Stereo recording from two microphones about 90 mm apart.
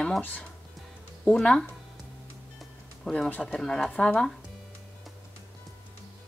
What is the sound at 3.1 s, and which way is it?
Speech, 10° left (ahead or behind).